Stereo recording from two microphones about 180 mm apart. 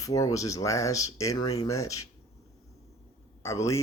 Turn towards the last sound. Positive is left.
turn(degrees=15)  # may be behind; listen again after turning